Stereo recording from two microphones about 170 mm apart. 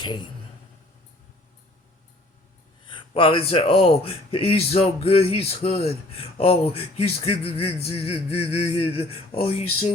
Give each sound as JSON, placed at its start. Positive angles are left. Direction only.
{"t": 0.0, "sound": "a man's voice", "side_deg": 25}
{"t": 2.8, "sound": "speech", "side_deg": 30}